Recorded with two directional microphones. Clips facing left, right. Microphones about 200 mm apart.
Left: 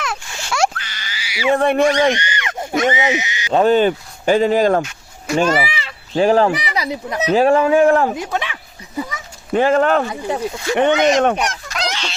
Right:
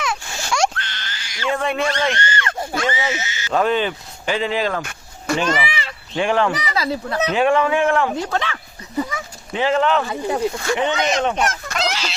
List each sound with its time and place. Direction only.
0.0 s a sound: centre (ahead or behind)
1.5 s speech: 50° left (ahead or behind)
1.8 s speech: 15° left (ahead or behind)
2.1 s a sound: 15° left (ahead or behind)
3.5 s speech: 30° left (ahead or behind)
3.8 s speech: 45° left (ahead or behind)
4.8 s a sound: 55° right (ahead or behind)
5.4 s a man's voice: 40° left (ahead or behind)
6.5 s speech: 15° left (ahead or behind)
7.3 s a man's voice: 35° left (ahead or behind)
8.1 s speech: 15° left (ahead or behind)
9.5 s speech: 50° left (ahead or behind)
10.8 s speech: 55° left (ahead or behind)
11.4 s fowl: centre (ahead or behind)